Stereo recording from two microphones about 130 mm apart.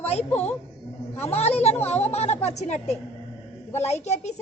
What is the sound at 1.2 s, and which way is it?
Speech, 55° left (ahead or behind).